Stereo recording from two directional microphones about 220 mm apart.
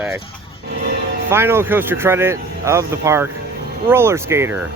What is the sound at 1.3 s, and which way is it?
Speech, 10° right (ahead or behind).